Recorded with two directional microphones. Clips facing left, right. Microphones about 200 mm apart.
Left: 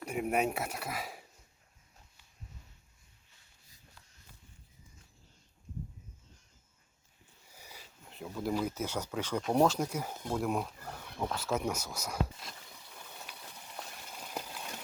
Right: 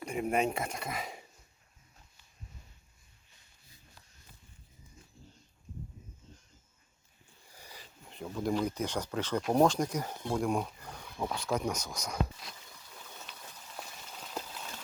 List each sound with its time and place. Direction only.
0.0 s speech: 5° left (ahead or behind)
7.4 s speech: 10° left (ahead or behind)
13.3 s a sound: 10° left (ahead or behind)